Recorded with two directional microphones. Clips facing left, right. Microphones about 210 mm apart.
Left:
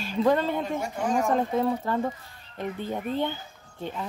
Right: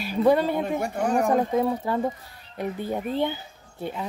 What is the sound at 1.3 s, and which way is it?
Speech, 10° right (ahead or behind).